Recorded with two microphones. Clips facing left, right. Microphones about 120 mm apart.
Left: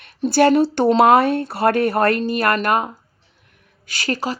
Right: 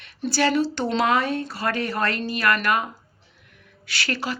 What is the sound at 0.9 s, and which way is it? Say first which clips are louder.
Speech: left 7 dB; 50° left (ahead or behind).